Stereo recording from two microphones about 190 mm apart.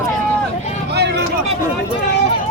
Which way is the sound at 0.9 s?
65° right (ahead or behind).